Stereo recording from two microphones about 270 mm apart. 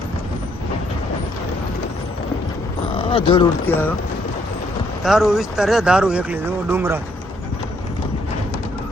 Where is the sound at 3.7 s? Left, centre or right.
Centre.